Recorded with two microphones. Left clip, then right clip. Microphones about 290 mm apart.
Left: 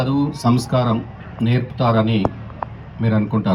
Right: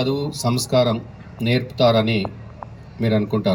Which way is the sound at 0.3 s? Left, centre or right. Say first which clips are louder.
Left 2 dB; right.